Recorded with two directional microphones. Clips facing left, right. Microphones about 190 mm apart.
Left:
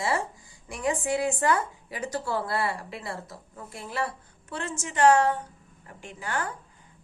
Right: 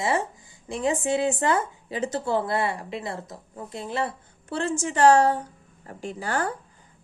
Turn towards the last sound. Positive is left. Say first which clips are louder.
# right 5 dB
turn(degrees=-35)  # may be behind; listen again after turning